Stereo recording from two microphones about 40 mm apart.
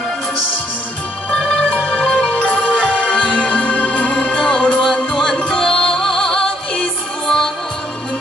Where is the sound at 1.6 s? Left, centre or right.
Left.